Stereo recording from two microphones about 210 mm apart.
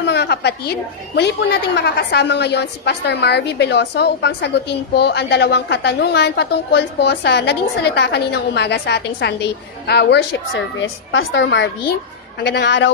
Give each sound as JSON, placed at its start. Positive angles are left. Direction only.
{"t": 0.0, "sound": "a woman's voice", "side_deg": 55}